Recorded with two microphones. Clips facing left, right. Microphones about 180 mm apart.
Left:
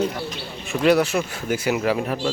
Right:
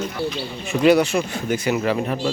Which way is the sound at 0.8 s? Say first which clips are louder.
Right 2 dB; centre (ahead or behind).